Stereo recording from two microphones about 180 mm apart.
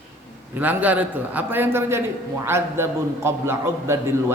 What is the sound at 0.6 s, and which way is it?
A man's voice, 10° right (ahead or behind).